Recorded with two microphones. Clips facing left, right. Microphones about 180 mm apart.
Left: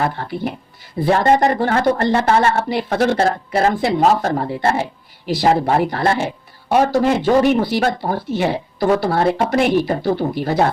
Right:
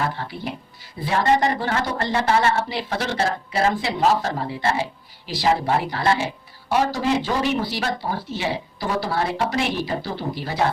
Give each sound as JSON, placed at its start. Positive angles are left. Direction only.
{"t": 1.0, "sound": "a woman's voice", "side_deg": 50}